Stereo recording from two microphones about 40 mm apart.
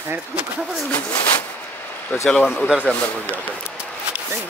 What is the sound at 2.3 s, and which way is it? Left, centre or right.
Speech, left.